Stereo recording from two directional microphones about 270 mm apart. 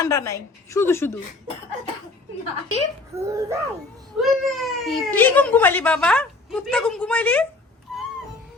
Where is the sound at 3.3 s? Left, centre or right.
Centre.